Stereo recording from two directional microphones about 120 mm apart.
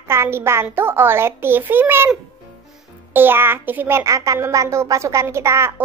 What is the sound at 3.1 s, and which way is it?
A child's voice, 20° right (ahead or behind).